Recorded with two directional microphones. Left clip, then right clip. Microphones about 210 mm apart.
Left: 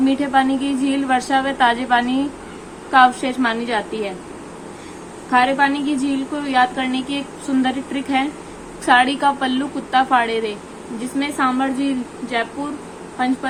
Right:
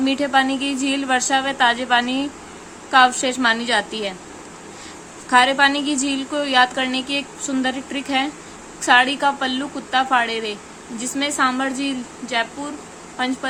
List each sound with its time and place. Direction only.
0.0 s a woman's voice: 15° right (ahead or behind)
5.3 s a woman's voice: 20° right (ahead or behind)